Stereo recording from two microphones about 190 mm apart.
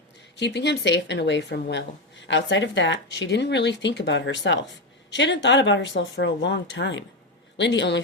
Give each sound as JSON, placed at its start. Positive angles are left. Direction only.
{"t": 0.3, "sound": "speech", "side_deg": 65}